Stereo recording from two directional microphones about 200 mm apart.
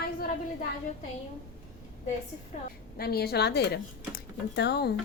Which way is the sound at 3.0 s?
50° left (ahead or behind).